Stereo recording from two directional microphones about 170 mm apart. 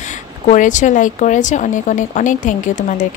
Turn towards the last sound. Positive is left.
turn(degrees=50)  # may be behind; listen again after turning